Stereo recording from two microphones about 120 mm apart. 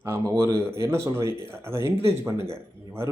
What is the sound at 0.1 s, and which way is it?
Speech, 25° right (ahead or behind).